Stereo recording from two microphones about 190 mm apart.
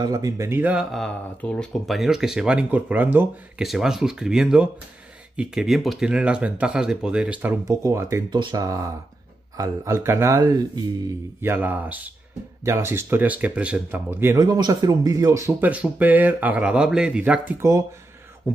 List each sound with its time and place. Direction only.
0.0 s speech: 20° right (ahead or behind)
7.6 s speech: 15° right (ahead or behind)